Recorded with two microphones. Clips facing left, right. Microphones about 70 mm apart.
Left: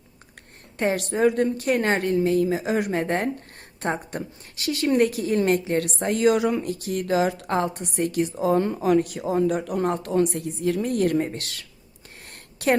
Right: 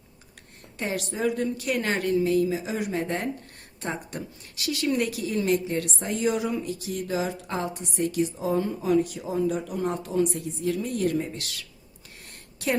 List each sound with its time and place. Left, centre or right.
0.8 s a woman's voice: left